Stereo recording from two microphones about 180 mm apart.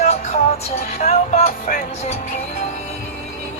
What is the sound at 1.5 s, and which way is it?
Music, 50° left (ahead or behind).